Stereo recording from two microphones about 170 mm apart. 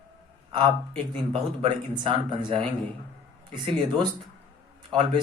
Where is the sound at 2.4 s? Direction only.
30° right (ahead or behind).